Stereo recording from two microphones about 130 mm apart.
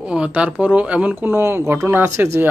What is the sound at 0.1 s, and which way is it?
Speech, 10° right (ahead or behind).